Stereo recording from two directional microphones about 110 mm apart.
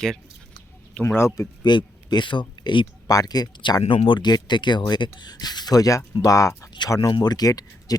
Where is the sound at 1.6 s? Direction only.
45° left (ahead or behind).